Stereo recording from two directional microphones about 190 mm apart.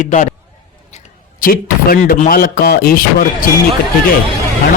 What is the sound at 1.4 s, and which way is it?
Speech, 50° left (ahead or behind).